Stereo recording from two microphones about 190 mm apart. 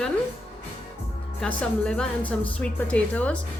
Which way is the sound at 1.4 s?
5° left (ahead or behind).